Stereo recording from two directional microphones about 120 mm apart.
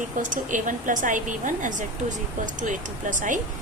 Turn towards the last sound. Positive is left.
turn(degrees=-90)